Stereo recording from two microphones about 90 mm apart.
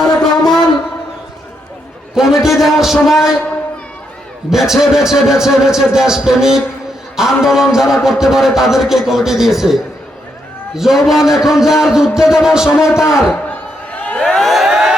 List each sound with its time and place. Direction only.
0.2 s a sound: 5° left (ahead or behind)
2.1 s speech: 5° right (ahead or behind)
4.4 s speech: 5° right (ahead or behind)
10.8 s speech: 5° right (ahead or behind)
12.8 s a man's voice: 35° left (ahead or behind)
13.3 s crowd: 15° left (ahead or behind); by 14.9 s 5° right (ahead or behind)